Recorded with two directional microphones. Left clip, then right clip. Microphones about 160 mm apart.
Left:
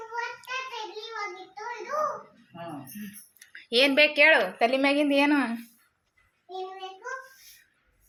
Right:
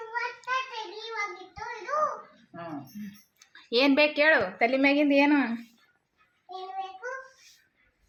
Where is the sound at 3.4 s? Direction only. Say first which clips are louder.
Left 2 dB; 15° right (ahead or behind).